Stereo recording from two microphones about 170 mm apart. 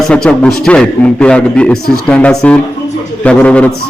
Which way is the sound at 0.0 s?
5° left (ahead or behind).